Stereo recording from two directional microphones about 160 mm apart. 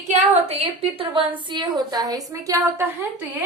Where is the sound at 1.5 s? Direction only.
30° right (ahead or behind).